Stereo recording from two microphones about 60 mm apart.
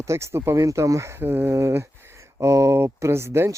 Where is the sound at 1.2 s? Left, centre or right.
Right.